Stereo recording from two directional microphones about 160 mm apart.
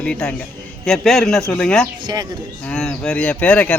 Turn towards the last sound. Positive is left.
turn(degrees=10)  # may be behind; listen again after turning